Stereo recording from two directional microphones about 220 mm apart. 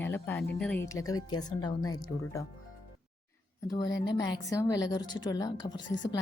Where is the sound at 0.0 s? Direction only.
10° left (ahead or behind).